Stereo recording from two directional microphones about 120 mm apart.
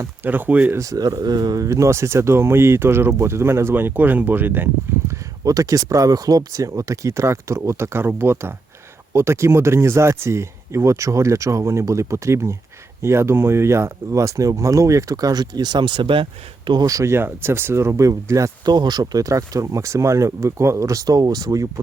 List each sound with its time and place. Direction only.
0.3 s speech: 15° right (ahead or behind)
0.8 s speech: 30° right (ahead or behind)